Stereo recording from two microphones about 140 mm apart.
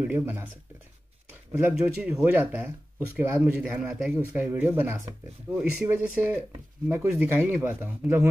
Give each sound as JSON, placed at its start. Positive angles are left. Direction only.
{"t": 0.0, "sound": "speech", "side_deg": -15}
{"t": 1.6, "sound": "speech", "side_deg": -5}